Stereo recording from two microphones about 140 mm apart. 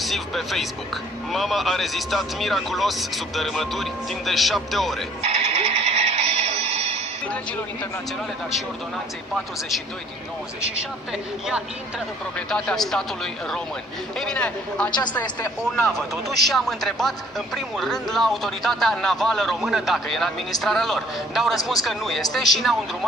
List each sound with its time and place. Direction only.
0.0 s speech: centre (ahead or behind)
5.2 s music: 50° right (ahead or behind)
9.3 s a man's voice: centre (ahead or behind)
14.8 s a woman's voice: 30° left (ahead or behind)
15.7 s speech: 5° left (ahead or behind)